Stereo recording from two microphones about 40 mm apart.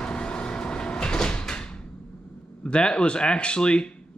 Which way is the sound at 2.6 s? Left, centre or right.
Left.